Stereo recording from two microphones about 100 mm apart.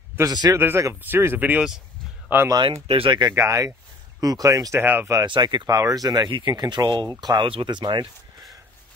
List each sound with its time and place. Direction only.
0.2 s speech: 40° right (ahead or behind)
0.6 s speech: 25° right (ahead or behind)
2.7 s speech: 65° right (ahead or behind)
3.3 s speech: 30° right (ahead or behind)
4.7 s speech: 20° right (ahead or behind)
5.2 s speech: 50° right (ahead or behind)
5.8 s speech: 40° right (ahead or behind)